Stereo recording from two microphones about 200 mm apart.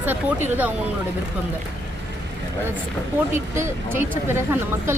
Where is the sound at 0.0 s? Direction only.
10° right (ahead or behind).